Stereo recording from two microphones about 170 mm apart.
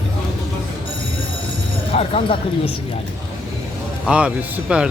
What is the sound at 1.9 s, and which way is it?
Speech, 35° left (ahead or behind).